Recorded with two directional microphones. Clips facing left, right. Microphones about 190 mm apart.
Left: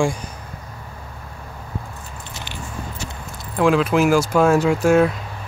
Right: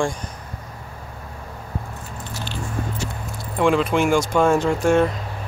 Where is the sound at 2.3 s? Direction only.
15° left (ahead or behind).